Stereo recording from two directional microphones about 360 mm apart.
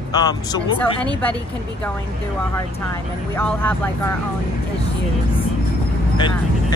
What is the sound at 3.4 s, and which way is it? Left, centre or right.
Speech, centre.